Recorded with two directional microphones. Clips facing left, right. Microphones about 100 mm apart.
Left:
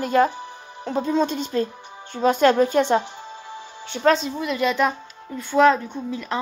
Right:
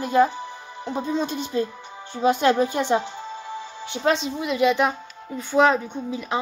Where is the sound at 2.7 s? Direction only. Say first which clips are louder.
Left 3 dB; 55° left (ahead or behind).